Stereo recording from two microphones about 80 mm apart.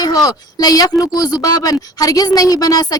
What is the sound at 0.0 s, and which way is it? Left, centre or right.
A woman's voice, left.